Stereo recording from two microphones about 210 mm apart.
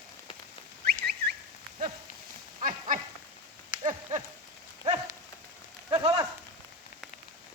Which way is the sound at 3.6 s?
25° right (ahead or behind).